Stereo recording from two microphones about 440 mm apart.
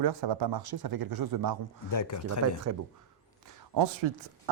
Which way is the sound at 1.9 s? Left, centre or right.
Left.